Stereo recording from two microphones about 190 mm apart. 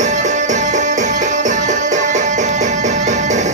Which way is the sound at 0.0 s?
40° right (ahead or behind).